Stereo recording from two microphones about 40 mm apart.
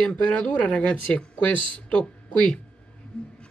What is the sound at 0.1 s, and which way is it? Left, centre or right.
Speech, left.